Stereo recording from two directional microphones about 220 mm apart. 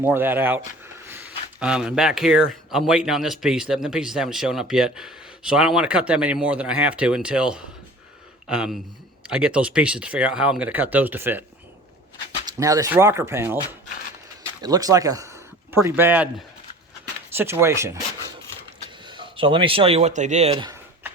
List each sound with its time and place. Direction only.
0.0 s speech: 10° right (ahead or behind)
12.5 s speech: 15° right (ahead or behind)
14.6 s speech: 15° right (ahead or behind)
17.3 s speech: 10° right (ahead or behind)
19.0 s speech: 20° right (ahead or behind)